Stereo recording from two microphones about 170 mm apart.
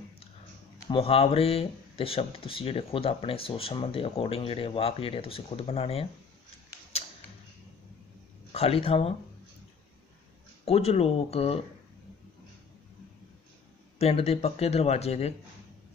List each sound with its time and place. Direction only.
0.8 s speech: 35° left (ahead or behind)
6.9 s a sound: 35° left (ahead or behind)
8.5 s speech: 35° left (ahead or behind)
10.6 s speech: 35° left (ahead or behind)
13.9 s speech: 35° left (ahead or behind)